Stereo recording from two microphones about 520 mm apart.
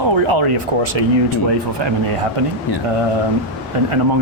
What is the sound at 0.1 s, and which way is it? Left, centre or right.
Speech, right.